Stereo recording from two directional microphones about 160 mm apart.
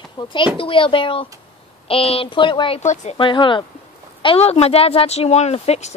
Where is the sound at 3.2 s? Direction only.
30° left (ahead or behind).